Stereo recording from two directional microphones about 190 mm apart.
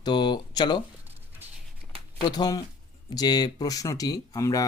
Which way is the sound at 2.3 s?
20° left (ahead or behind).